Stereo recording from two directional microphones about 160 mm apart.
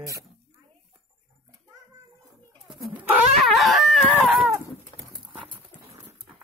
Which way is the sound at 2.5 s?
Centre (ahead or behind).